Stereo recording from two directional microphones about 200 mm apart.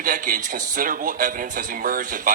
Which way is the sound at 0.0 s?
40° right (ahead or behind).